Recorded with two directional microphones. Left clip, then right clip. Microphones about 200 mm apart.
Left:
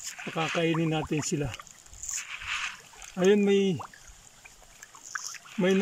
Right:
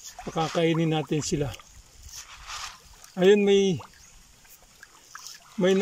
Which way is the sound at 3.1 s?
5° right (ahead or behind).